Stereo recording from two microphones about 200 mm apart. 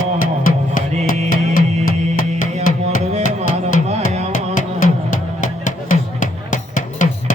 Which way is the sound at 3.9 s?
30° right (ahead or behind).